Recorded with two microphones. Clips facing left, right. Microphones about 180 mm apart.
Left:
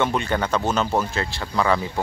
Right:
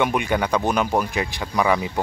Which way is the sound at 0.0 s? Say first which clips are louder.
Right 1 dB; 15° right (ahead or behind).